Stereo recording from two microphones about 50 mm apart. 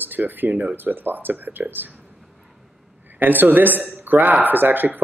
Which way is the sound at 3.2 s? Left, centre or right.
Right.